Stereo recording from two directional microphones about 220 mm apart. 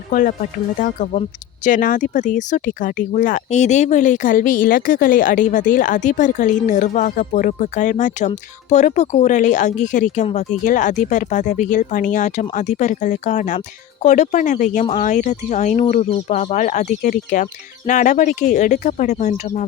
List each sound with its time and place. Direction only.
0.1 s speech: 35° left (ahead or behind)